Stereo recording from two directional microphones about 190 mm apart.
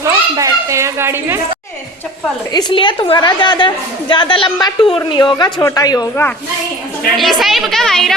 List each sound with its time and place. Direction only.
0.0 s children playing: 15° right (ahead or behind)
2.5 s a woman's voice: 20° left (ahead or behind)
7.2 s a woman's voice: centre (ahead or behind)